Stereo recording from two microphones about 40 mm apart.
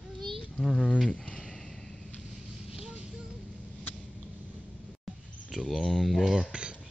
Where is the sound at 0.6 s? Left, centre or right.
Centre.